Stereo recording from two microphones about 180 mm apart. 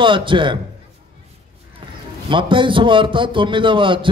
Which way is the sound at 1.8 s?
30° right (ahead or behind).